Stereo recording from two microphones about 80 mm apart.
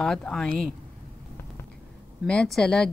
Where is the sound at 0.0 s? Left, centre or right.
Centre.